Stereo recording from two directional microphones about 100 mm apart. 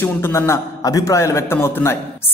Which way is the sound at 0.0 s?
25° left (ahead or behind).